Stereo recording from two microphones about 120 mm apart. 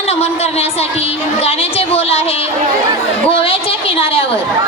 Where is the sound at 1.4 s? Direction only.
55° left (ahead or behind).